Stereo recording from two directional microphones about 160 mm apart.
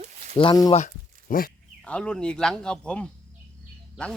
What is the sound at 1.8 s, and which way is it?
Speech, 5° left (ahead or behind).